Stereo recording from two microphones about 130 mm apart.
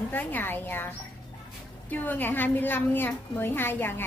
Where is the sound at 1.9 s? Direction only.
15° left (ahead or behind).